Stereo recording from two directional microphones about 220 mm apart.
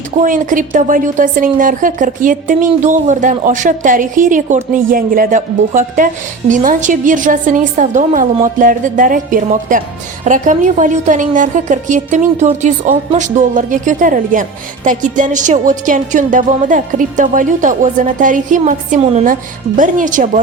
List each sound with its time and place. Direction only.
0.2 s a woman's voice: 35° right (ahead or behind)